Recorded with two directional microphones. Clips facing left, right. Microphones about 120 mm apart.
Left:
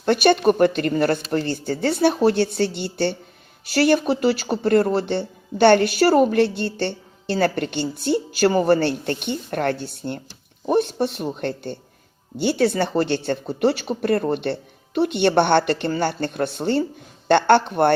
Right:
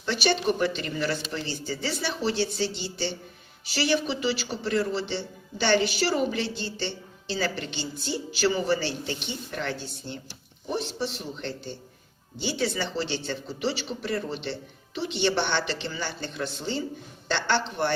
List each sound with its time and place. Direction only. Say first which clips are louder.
0.0 s speech: left 9 dB; 55° left (ahead or behind)